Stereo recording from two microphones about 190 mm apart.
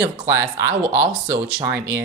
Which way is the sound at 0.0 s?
15° right (ahead or behind).